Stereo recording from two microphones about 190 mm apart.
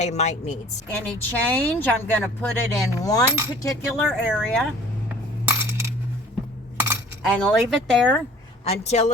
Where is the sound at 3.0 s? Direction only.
20° left (ahead or behind).